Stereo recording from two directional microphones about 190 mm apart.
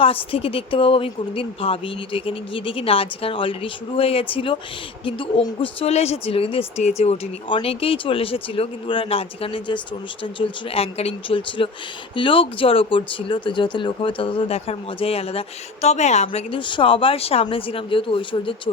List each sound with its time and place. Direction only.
0.0 s speech: 30° left (ahead or behind)
5.6 s speech: 35° left (ahead or behind)